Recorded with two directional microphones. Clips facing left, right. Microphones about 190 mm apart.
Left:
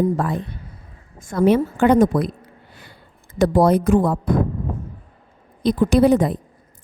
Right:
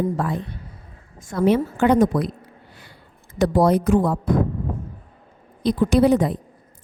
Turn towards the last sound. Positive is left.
turn(degrees=50)  # may be behind; listen again after turning